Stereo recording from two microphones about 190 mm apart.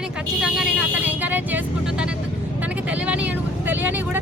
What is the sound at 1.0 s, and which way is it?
Vehicle, 10° right (ahead or behind).